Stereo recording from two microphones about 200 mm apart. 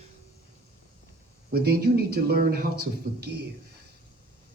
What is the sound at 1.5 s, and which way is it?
Speech, 50° right (ahead or behind).